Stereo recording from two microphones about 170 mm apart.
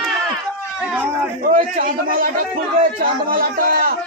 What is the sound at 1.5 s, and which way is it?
Speech, 55° right (ahead or behind).